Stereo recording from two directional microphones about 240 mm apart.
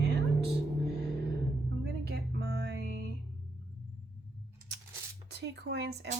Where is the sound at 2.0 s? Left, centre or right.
Right.